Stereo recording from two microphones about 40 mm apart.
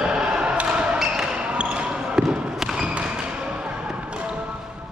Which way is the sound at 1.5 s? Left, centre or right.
Right.